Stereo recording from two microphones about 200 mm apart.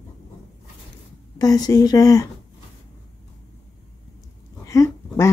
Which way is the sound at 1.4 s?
20° left (ahead or behind).